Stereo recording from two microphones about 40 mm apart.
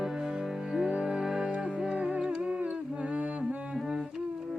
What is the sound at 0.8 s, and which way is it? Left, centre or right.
Music, right.